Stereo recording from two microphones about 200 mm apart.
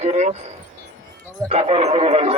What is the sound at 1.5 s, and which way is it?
Speech, 30° right (ahead or behind).